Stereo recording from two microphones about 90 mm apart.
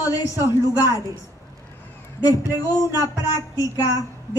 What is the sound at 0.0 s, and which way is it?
A woman's voice, 35° left (ahead or behind).